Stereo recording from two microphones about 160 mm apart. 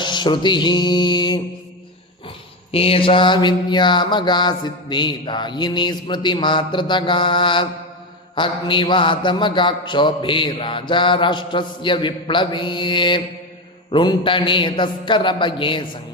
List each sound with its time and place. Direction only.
0.0 s mantra: 30° left (ahead or behind)
2.7 s mantra: 35° left (ahead or behind)